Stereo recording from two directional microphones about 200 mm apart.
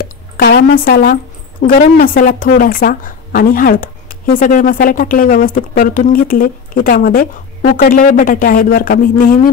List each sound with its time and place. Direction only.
0.0 s speech: 50° left (ahead or behind)